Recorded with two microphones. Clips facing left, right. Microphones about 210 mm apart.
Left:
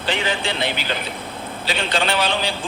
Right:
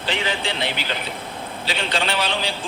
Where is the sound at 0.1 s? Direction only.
50° left (ahead or behind).